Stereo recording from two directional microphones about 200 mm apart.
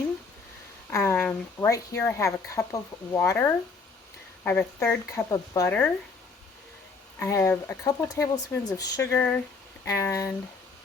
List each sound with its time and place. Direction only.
0.9 s a woman's voice: 10° left (ahead or behind)
7.2 s a woman's voice: 15° left (ahead or behind)